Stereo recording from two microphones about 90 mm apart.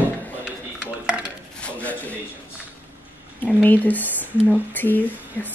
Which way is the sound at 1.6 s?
15° left (ahead or behind).